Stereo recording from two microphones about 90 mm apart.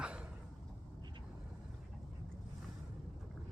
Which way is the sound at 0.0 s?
10° right (ahead or behind).